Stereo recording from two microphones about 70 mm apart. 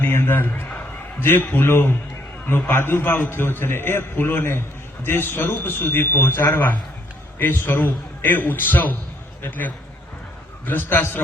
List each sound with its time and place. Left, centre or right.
0.0 s a man's voice: left